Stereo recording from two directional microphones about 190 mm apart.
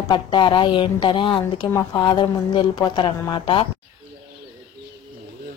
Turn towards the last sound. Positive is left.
turn(degrees=25)  # may be behind; listen again after turning